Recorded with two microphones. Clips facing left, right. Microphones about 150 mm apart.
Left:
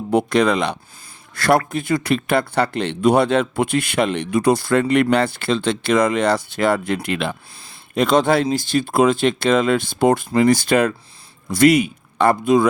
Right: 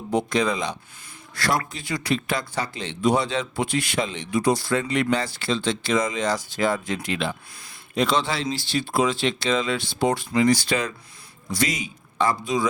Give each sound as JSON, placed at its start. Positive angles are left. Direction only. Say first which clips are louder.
{"t": 0.1, "sound": "speech", "louder": "left 6 dB", "side_deg": 65}